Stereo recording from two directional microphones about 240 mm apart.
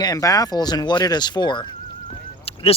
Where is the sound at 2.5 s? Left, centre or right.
Left.